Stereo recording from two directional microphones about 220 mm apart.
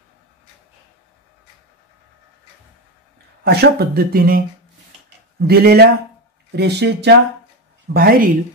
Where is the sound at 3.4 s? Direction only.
45° right (ahead or behind).